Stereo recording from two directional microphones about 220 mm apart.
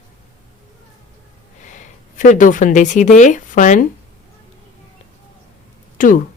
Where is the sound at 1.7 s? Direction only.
35° left (ahead or behind).